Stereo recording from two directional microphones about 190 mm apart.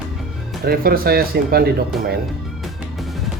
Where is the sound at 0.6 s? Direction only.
50° right (ahead or behind).